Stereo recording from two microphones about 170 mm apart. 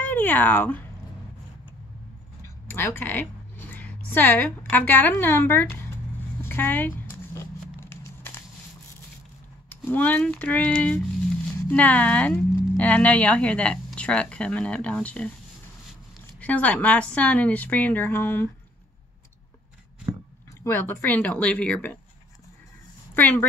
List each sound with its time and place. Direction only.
0.0 s speech: 10° left (ahead or behind)
2.7 s a woman's voice: 10° left (ahead or behind)
6.4 s a sound: 10° left (ahead or behind)
9.8 s speech: 10° left (ahead or behind)
16.3 s speech: 10° left (ahead or behind)
20.6 s speech: 15° left (ahead or behind)
23.1 s speech: 10° left (ahead or behind)